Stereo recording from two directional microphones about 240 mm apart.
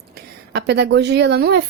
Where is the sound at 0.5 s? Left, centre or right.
Right.